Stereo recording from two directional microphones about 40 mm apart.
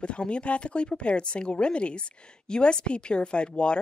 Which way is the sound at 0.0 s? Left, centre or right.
Left.